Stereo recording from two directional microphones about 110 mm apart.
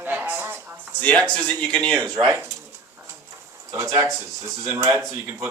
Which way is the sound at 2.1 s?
30° right (ahead or behind).